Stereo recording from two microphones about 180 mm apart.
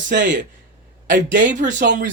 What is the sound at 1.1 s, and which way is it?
Speech, 45° right (ahead or behind).